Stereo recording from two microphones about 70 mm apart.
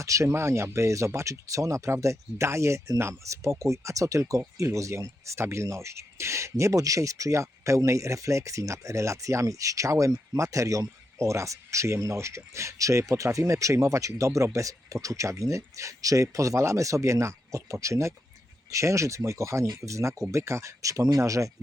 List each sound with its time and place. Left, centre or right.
0.0 s speech: right